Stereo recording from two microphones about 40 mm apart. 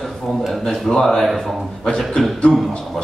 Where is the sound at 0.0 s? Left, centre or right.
Centre.